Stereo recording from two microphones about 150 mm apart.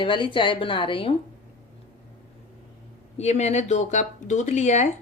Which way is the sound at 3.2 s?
45° left (ahead or behind).